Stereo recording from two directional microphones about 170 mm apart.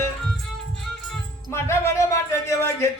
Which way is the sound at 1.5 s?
15° left (ahead or behind).